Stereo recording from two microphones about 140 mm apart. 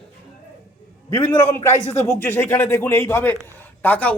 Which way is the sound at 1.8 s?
50° left (ahead or behind).